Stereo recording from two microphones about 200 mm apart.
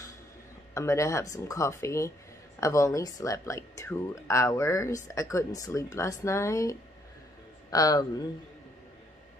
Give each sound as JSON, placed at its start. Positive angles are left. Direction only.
{"t": 0.7, "sound": "speech", "side_deg": 15}